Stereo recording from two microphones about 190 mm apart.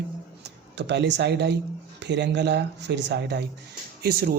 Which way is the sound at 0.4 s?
65° right (ahead or behind).